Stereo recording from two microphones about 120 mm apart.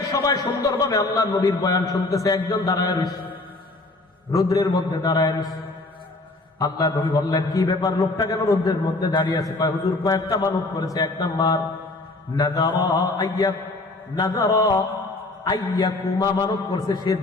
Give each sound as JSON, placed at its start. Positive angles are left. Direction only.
{"t": 0.1, "sound": "a man's voice", "side_deg": 30}
{"t": 4.3, "sound": "a man's voice", "side_deg": 30}
{"t": 6.6, "sound": "a man's voice", "side_deg": 35}